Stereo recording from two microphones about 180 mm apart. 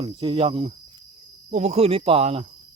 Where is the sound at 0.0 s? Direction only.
30° right (ahead or behind).